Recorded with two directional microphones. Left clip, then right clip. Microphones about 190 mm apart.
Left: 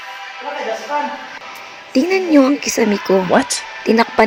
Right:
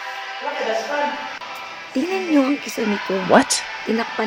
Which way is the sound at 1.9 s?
30° left (ahead or behind).